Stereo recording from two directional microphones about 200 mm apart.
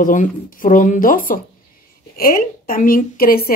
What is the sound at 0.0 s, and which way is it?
Speech, 40° left (ahead or behind).